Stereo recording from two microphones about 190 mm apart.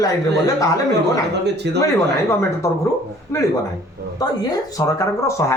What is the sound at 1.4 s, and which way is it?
Speech, 65° right (ahead or behind).